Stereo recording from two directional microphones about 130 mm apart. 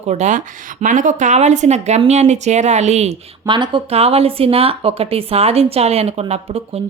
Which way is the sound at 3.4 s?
40° right (ahead or behind).